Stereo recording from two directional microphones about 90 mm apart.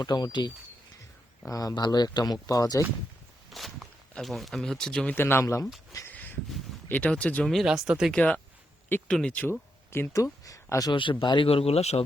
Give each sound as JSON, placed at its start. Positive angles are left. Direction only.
{"t": 0.0, "sound": "speech", "side_deg": 50}
{"t": 1.5, "sound": "speech", "side_deg": 40}
{"t": 3.5, "sound": "speech", "side_deg": 0}
{"t": 5.1, "sound": "speech", "side_deg": 25}
{"t": 6.1, "sound": "a sound", "side_deg": 20}
{"t": 6.8, "sound": "speech", "side_deg": 15}
{"t": 7.5, "sound": "speech", "side_deg": -5}
{"t": 8.1, "sound": "speech", "side_deg": 10}
{"t": 9.5, "sound": "speech", "side_deg": 25}
{"t": 10.4, "sound": "speech", "side_deg": 40}
{"t": 10.9, "sound": "speech", "side_deg": 60}